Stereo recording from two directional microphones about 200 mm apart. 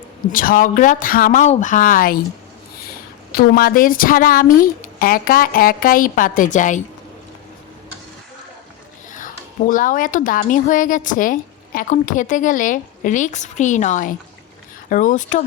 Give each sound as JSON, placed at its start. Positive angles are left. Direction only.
{"t": 0.3, "sound": "a woman's voice", "side_deg": 45}
{"t": 3.3, "sound": "a woman's voice", "side_deg": 45}
{"t": 9.1, "sound": "speech", "side_deg": 40}